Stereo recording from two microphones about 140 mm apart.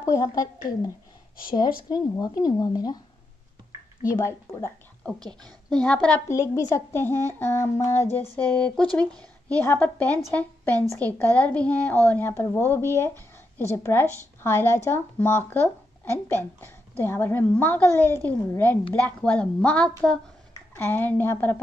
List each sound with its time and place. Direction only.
0.0 s speech: 25° left (ahead or behind)
4.1 s speech: 20° left (ahead or behind)
5.9 s speech: 10° left (ahead or behind)
6.2 s speech: 20° left (ahead or behind)